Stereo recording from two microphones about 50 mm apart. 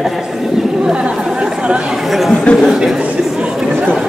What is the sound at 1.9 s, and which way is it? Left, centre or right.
Speech, centre.